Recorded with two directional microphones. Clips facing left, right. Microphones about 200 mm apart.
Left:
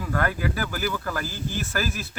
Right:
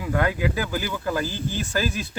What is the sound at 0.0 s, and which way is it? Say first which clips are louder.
Speech: right 3 dB; 15° right (ahead or behind).